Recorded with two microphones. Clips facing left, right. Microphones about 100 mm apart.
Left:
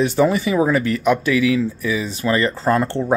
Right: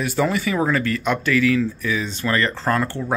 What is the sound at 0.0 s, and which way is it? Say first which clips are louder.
Speech: left 5 dB; 20° left (ahead or behind).